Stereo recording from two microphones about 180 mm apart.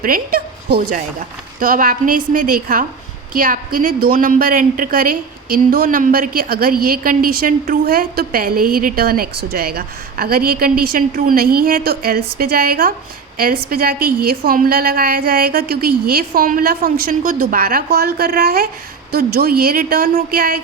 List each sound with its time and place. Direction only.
0.0 s a woman's voice: 55° right (ahead or behind)